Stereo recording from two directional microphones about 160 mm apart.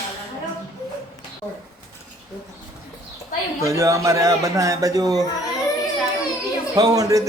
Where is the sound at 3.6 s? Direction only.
20° right (ahead or behind).